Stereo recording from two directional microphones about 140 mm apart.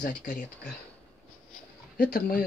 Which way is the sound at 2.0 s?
90° left.